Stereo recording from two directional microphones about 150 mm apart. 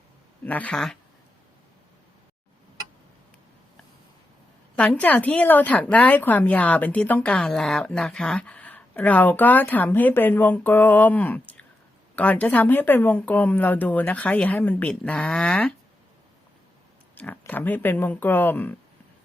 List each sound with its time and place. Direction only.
0.4 s a woman's voice: 10° left (ahead or behind)
4.8 s a woman's voice: 10° left (ahead or behind)
17.2 s a woman's voice: 10° left (ahead or behind)